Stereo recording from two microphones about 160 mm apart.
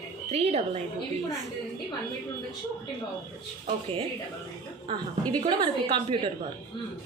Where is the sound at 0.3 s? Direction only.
45° right (ahead or behind).